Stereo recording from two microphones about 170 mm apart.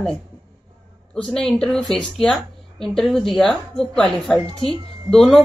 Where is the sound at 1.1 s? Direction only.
5° left (ahead or behind).